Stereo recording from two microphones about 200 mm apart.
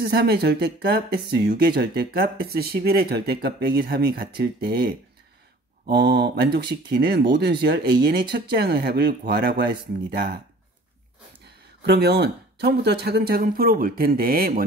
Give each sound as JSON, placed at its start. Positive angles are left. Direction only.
{"t": 0.0, "sound": "speech", "side_deg": -55}
{"t": 11.8, "sound": "speech", "side_deg": -55}